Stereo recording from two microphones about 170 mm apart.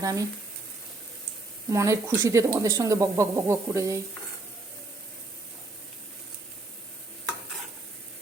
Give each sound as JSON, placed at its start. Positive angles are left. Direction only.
{"t": 0.0, "sound": "speech", "side_deg": -20}
{"t": 1.7, "sound": "speech", "side_deg": -20}